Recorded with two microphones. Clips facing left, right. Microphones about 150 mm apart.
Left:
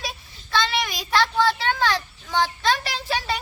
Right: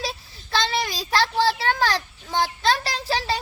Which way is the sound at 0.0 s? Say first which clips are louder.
Right 3 dB; 35° right (ahead or behind).